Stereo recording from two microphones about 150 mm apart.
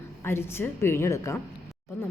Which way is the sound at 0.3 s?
15° left (ahead or behind).